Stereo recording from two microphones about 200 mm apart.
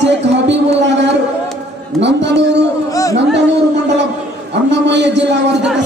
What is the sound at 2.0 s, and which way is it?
Speech, 60° right (ahead or behind).